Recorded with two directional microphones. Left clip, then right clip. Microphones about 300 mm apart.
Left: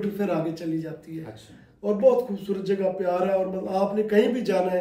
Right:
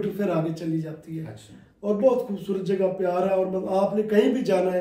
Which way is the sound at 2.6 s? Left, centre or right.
Centre.